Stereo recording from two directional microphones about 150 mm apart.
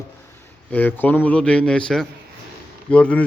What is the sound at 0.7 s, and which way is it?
Speech, 10° left (ahead or behind).